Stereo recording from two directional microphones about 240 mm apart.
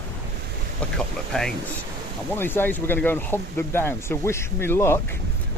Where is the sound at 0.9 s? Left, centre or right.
Centre.